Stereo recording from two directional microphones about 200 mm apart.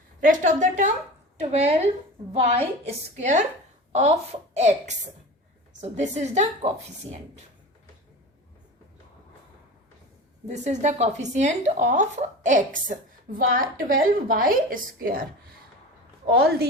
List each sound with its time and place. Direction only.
0.2 s a woman's voice: 40° right (ahead or behind)
10.4 s a woman's voice: 35° right (ahead or behind); by 16.6 s 50° right (ahead or behind)